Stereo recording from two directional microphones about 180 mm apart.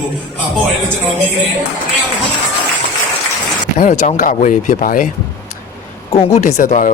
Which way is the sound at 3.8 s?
40° left (ahead or behind).